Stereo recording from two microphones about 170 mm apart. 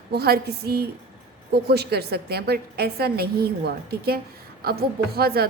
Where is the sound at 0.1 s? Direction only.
70° right (ahead or behind).